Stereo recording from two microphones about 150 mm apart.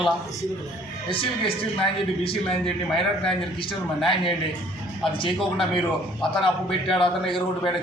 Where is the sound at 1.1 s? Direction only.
40° left (ahead or behind).